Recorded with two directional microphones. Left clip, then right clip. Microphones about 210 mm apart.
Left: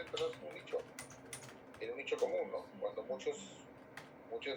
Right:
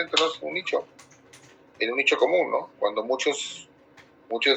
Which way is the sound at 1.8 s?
45° right (ahead or behind).